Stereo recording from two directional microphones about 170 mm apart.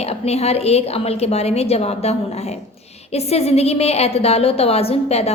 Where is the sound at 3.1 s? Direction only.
40° left (ahead or behind).